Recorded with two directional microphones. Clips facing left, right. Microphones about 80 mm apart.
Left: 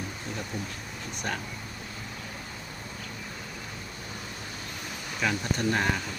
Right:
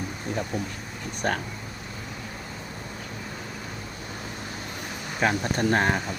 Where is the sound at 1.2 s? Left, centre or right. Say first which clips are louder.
Right 7 dB; right.